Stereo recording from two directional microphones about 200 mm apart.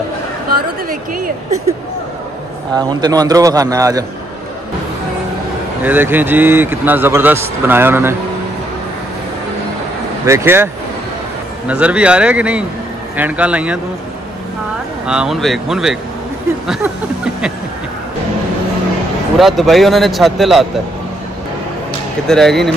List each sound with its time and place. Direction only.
0.8 s speech: 45° right (ahead or behind)
2.7 s speech: 20° right (ahead or behind)
5.8 s speech: 10° right (ahead or behind)
10.2 s speech: 10° right (ahead or behind)
15.0 s speech: 5° right (ahead or behind)
16.6 s a sound: centre (ahead or behind)
19.3 s speech: centre (ahead or behind)
22.3 s speech: centre (ahead or behind)